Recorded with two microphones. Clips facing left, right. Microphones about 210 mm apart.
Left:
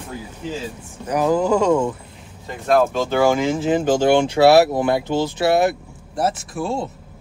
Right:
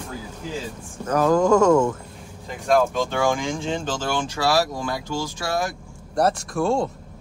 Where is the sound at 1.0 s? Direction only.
10° left (ahead or behind).